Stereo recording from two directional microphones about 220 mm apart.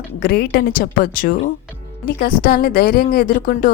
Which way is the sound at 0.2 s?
45° left (ahead or behind).